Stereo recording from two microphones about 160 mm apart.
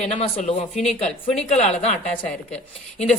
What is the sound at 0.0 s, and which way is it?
A woman's voice, 45° left (ahead or behind).